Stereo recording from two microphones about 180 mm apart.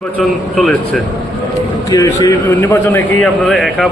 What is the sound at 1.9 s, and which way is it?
A man's voice, 20° left (ahead or behind).